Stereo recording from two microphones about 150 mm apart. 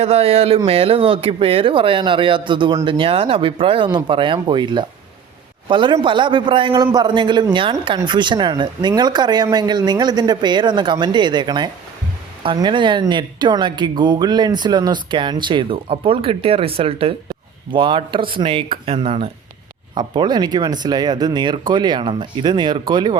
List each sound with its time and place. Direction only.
0.0 s speech: 40° right (ahead or behind)